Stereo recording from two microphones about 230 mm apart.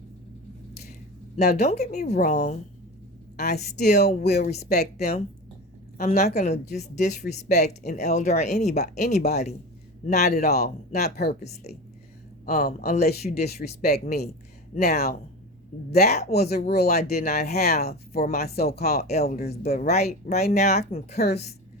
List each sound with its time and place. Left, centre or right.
1.5 s speech: left
3.8 s speech: left
4.1 s speech: left
12.5 s speech: left